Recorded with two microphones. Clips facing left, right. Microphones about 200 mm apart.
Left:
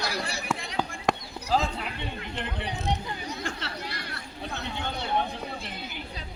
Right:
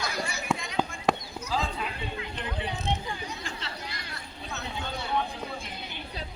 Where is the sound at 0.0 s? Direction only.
35° left (ahead or behind).